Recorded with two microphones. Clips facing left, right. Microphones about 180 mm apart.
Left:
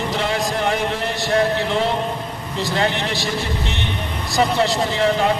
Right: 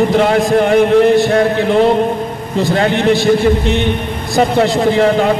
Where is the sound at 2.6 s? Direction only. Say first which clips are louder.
Right 8 dB; 55° right (ahead or behind).